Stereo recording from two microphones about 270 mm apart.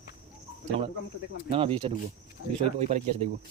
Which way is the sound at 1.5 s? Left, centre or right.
Centre.